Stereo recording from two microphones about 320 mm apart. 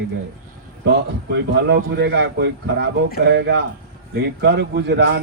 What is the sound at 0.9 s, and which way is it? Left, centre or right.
Speech, right.